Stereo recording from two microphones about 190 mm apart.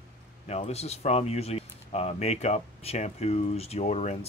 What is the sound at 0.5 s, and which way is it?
Speech, 35° left (ahead or behind).